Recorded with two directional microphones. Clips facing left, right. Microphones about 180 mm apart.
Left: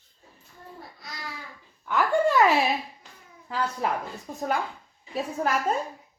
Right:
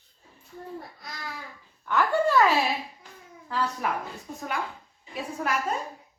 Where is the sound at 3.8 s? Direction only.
30° left (ahead or behind).